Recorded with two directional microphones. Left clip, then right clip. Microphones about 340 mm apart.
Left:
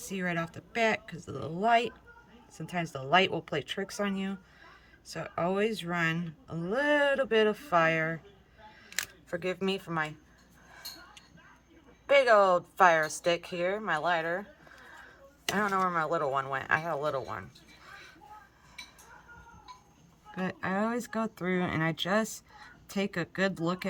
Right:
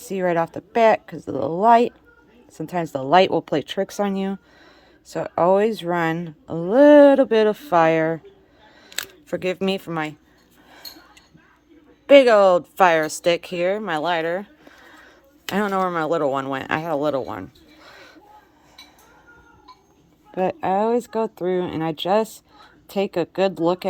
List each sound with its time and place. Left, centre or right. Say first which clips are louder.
0.0 s speech: right 13 dB; centre
12.0 s speech: right 10 dB; right
20.4 s speech: right 12 dB; centre